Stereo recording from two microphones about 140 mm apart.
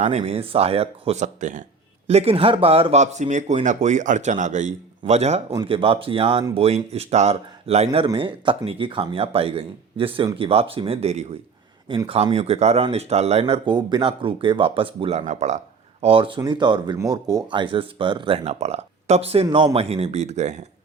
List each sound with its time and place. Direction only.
0.0 s speech: 50° right (ahead or behind)
2.0 s speech: 45° right (ahead or behind)
7.9 s speech: 40° right (ahead or behind)
11.9 s speech: 35° right (ahead or behind)
12.3 s speech: 50° right (ahead or behind)
13.4 s speech: 30° right (ahead or behind)
15.3 s speech: 55° right (ahead or behind)
19.5 s speech: 35° right (ahead or behind); by 20.7 s 55° right (ahead or behind)